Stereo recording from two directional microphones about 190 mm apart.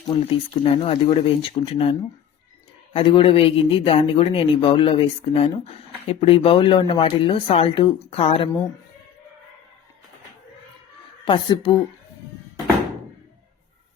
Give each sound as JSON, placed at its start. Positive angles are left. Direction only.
{"t": 0.1, "sound": "speech", "side_deg": 30}
{"t": 11.3, "sound": "speech", "side_deg": 25}